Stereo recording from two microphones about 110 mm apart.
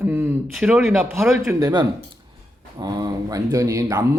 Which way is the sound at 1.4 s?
40° right (ahead or behind).